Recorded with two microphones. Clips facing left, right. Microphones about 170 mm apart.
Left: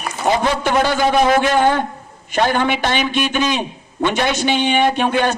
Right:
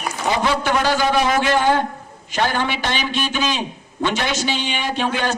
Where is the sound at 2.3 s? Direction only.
55° left (ahead or behind).